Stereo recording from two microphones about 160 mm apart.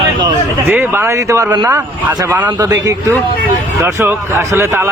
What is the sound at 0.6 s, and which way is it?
Speech, 15° right (ahead or behind).